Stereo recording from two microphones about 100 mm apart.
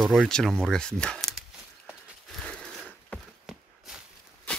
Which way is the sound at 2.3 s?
5° left (ahead or behind).